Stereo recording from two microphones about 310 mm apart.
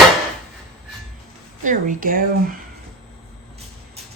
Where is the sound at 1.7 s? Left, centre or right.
Right.